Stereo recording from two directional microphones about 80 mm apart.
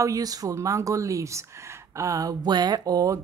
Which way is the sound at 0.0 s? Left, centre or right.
Right.